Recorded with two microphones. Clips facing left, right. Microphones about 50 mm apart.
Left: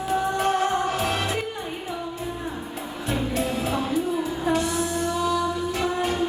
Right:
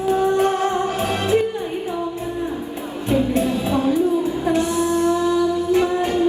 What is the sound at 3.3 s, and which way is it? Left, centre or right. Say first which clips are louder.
Music: right 6 dB; right.